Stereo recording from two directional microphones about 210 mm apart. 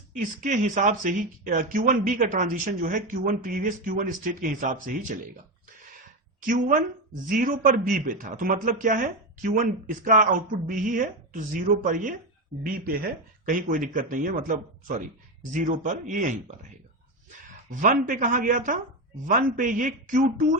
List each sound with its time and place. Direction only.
0.2 s speech: 35° right (ahead or behind)
6.4 s speech: 40° right (ahead or behind)
17.7 s speech: 40° right (ahead or behind)